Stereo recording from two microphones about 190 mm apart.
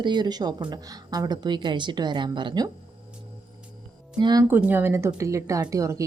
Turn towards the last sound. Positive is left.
turn(degrees=-15)  # may be behind; listen again after turning